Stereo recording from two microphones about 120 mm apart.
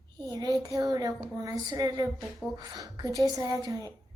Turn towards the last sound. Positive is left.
turn(degrees=-35)  # may be behind; listen again after turning